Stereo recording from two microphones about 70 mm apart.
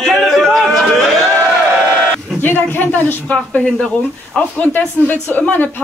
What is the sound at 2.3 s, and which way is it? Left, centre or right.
A woman's voice, left.